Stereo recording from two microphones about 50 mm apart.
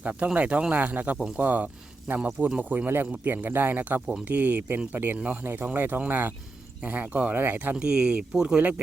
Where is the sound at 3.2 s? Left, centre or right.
Right.